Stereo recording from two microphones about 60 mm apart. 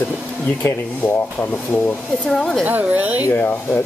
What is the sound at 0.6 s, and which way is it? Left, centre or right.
Speech, left.